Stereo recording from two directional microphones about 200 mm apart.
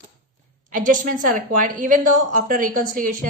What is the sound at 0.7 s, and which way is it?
A woman's voice, 40° right (ahead or behind).